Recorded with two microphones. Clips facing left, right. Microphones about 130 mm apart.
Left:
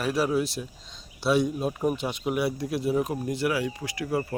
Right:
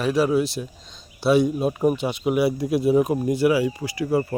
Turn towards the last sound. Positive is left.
turn(degrees=0)  # may be behind; listen again after turning